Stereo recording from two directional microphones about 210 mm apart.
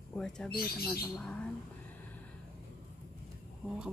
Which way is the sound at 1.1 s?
5° left (ahead or behind).